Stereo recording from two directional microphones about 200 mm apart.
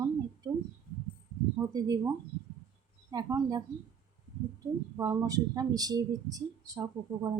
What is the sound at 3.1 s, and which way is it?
Speech, 20° right (ahead or behind).